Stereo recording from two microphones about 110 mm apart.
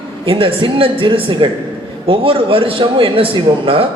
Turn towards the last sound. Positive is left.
turn(degrees=-55)  # may be behind; listen again after turning